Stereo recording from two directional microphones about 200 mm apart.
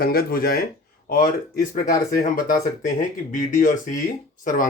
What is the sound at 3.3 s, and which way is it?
A man's voice, 40° left (ahead or behind).